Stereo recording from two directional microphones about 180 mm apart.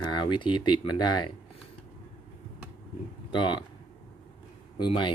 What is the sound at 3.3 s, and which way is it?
Speech, 25° left (ahead or behind).